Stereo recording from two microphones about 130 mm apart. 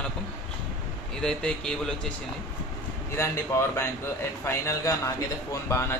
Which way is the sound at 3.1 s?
20° left (ahead or behind).